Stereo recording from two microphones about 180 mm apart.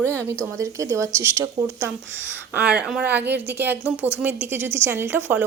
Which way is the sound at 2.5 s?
5° right (ahead or behind).